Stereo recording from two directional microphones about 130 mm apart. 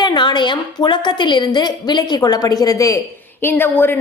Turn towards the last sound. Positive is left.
turn(degrees=15)  # may be behind; listen again after turning